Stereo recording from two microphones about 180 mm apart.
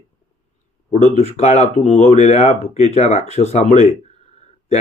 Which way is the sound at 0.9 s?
35° left (ahead or behind).